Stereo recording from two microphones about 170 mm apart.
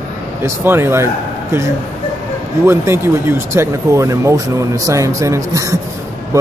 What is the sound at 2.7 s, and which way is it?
Speech, 15° right (ahead or behind).